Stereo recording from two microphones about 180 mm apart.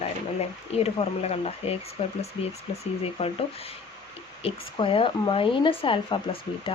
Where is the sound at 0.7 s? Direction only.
35° left (ahead or behind).